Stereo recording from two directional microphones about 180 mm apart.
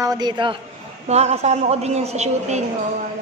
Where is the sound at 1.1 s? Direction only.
35° right (ahead or behind).